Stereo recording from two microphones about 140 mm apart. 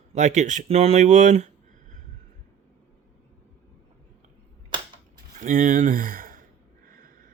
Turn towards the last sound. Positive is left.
turn(degrees=-85)